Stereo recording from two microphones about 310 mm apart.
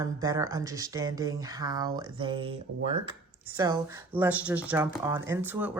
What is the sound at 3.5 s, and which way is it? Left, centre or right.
Speech, centre.